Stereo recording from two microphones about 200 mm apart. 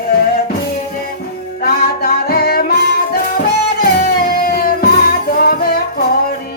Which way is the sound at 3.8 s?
45° left (ahead or behind).